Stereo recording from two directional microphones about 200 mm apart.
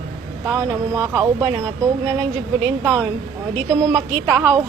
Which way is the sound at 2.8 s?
10° right (ahead or behind).